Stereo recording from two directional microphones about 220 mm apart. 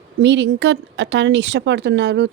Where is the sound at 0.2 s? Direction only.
55° right (ahead or behind).